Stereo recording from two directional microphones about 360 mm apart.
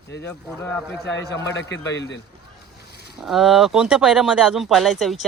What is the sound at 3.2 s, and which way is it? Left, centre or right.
A man's voice, centre.